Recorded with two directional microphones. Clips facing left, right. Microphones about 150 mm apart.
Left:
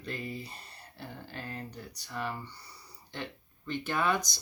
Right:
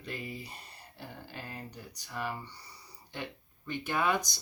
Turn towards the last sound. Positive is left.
turn(degrees=-15)  # may be behind; listen again after turning